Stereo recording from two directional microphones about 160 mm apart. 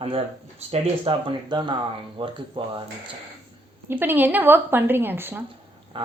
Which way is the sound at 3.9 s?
10° right (ahead or behind).